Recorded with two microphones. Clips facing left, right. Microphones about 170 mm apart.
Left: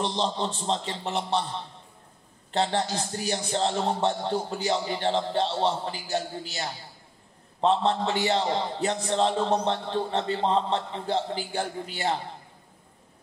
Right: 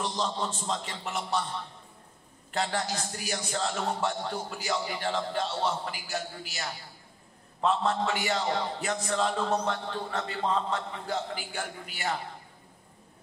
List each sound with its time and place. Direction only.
0.0 s a man's voice: 30° left (ahead or behind)
2.5 s a man's voice: 30° left (ahead or behind)